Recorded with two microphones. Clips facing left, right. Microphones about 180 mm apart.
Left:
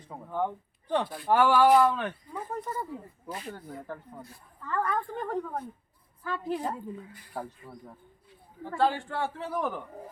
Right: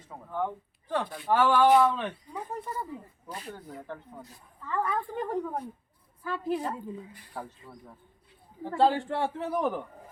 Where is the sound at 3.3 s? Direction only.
5° left (ahead or behind).